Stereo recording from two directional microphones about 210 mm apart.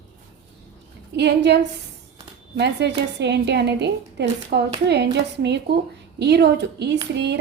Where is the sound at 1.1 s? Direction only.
55° right (ahead or behind).